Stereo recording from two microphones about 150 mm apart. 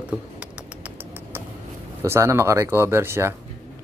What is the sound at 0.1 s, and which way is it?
Typing, 10° right (ahead or behind).